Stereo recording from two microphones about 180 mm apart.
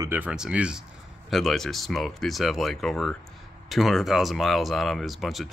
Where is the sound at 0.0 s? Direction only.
10° right (ahead or behind).